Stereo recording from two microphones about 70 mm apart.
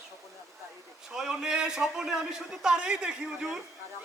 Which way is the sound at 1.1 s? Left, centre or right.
Centre.